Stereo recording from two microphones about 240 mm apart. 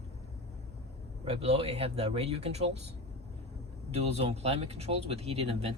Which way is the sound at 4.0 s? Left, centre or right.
Right.